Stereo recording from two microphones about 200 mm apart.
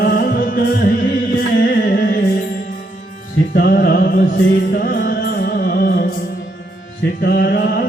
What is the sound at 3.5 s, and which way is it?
Music, 50° left (ahead or behind).